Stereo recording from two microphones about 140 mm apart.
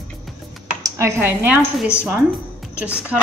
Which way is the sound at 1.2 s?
15° right (ahead or behind).